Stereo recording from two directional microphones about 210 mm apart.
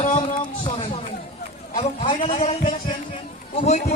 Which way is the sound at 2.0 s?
25° left (ahead or behind).